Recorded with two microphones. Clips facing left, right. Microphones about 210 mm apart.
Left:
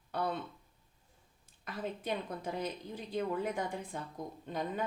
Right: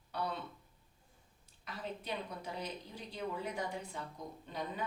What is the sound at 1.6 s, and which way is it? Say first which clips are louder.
A woman's voice: left 5 dB; 50° left (ahead or behind).